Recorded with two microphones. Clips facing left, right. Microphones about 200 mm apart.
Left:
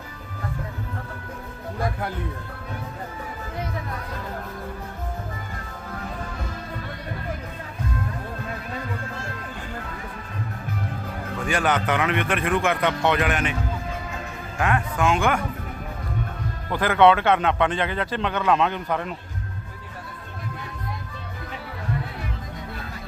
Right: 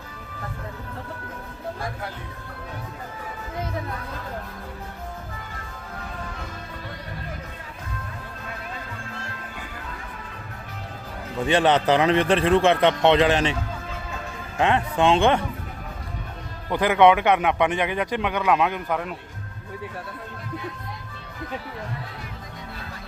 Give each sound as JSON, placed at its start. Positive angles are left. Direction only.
{"t": 11.4, "sound": "a man's voice", "side_deg": -30}
{"t": 14.6, "sound": "a man's voice", "side_deg": -25}
{"t": 16.6, "sound": "a man's voice", "side_deg": -15}